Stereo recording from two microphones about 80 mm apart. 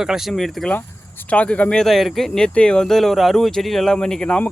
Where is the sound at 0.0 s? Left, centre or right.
Centre.